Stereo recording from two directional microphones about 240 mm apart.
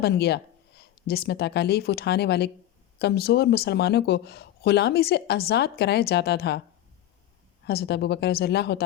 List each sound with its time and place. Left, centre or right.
0.0 s speech: left
7.7 s speech: left